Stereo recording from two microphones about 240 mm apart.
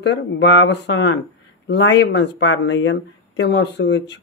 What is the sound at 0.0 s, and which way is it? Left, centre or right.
Speech, left.